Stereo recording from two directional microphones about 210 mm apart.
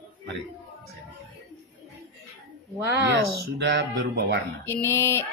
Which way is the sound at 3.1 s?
50° right (ahead or behind).